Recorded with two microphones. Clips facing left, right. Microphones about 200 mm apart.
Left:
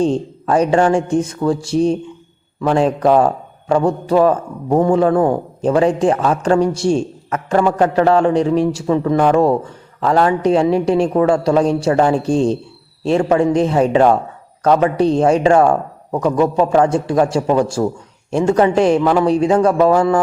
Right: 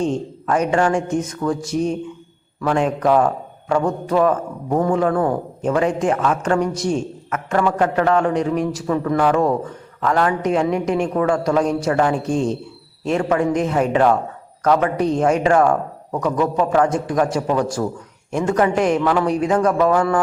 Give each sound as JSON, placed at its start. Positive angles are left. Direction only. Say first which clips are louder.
{"t": 0.0, "sound": "a man's voice", "louder": "left 5 dB", "side_deg": 30}